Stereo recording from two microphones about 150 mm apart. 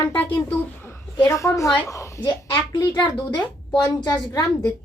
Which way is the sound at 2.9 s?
30° left (ahead or behind).